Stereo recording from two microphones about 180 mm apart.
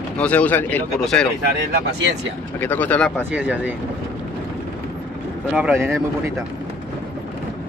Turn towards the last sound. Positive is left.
turn(degrees=-15)  # may be behind; listen again after turning